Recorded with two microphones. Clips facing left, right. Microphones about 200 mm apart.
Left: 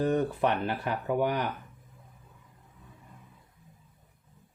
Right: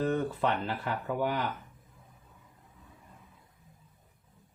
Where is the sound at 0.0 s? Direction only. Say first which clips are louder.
Left 3 dB; 15° left (ahead or behind).